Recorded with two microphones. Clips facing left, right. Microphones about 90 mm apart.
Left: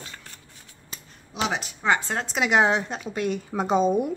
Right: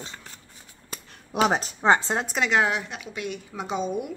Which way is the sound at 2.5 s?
25° left (ahead or behind).